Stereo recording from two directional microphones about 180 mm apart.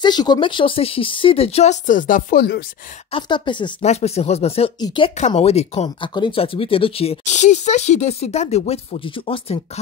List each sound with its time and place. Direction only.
0.0 s speech: 25° left (ahead or behind); by 2.6 s 60° left (ahead or behind)
3.1 s a woman's voice: 25° left (ahead or behind)
3.8 s a woman's voice: 35° left (ahead or behind)
5.1 s speech: 35° left (ahead or behind)